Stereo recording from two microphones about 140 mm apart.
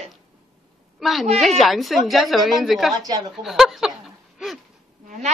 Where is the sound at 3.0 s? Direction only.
30° right (ahead or behind).